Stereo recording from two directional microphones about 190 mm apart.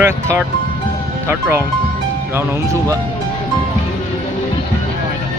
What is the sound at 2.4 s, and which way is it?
Speech, 15° right (ahead or behind).